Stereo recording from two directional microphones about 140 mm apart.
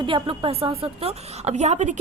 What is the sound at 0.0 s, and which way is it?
A woman's voice, 40° right (ahead or behind).